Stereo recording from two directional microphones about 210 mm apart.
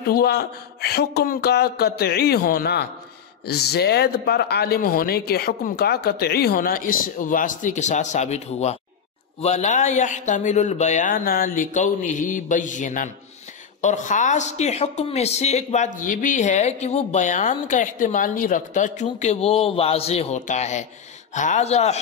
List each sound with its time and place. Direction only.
0.1 s a woman's voice: 50° left (ahead or behind); by 22.0 s 30° left (ahead or behind)